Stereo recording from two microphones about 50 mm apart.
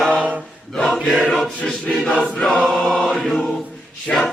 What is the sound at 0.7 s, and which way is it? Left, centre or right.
Choir, centre.